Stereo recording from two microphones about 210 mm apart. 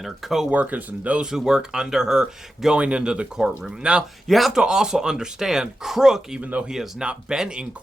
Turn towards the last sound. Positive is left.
turn(degrees=-5)  # may be behind; listen again after turning